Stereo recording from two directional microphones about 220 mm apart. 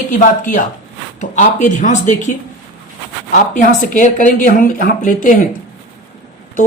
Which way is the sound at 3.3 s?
35° left (ahead or behind).